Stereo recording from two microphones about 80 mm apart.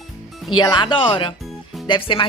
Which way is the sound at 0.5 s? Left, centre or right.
Left.